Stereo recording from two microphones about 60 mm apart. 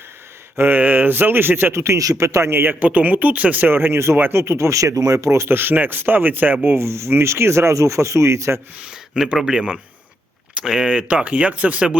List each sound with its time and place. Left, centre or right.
0.5 s speech: right
1.7 s speech: right
2.0 s speech: right
2.8 s speech: right
6.7 s speech: right
8.8 s speech: centre